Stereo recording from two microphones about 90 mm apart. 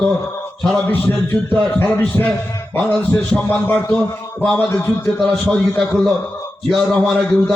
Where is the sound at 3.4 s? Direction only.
20° left (ahead or behind); by 7.5 s centre (ahead or behind).